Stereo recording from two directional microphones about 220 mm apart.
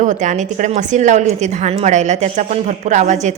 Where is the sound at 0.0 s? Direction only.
35° right (ahead or behind).